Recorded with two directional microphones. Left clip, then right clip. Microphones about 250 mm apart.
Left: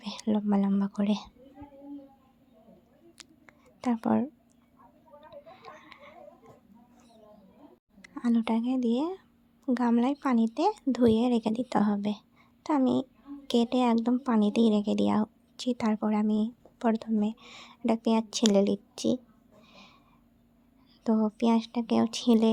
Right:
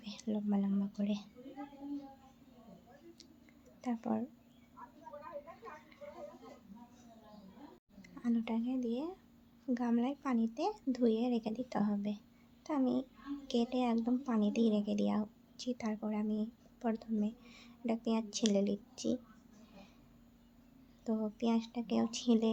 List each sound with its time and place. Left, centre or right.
0.0 s speech: left
3.4 s a sound: left
8.0 s speech: left
21.0 s speech: left